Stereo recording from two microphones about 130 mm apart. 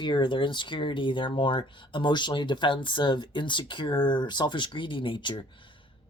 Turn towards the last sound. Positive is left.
turn(degrees=40)  # may be behind; listen again after turning